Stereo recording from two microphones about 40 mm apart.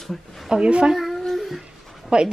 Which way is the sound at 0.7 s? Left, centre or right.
Right.